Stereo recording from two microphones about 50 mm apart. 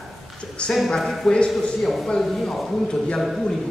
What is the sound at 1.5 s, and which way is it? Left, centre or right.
Speech, centre.